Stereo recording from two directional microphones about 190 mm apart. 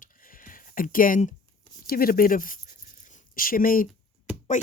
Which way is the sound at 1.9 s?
50° left (ahead or behind).